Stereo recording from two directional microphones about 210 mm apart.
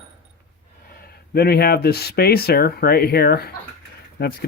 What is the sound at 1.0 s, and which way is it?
Speech, 45° left (ahead or behind).